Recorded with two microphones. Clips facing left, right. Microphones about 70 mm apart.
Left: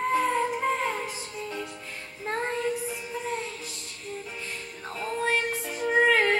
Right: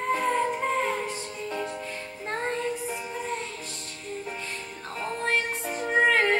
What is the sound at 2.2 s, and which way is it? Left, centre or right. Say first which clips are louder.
Music: left 1 dB; centre.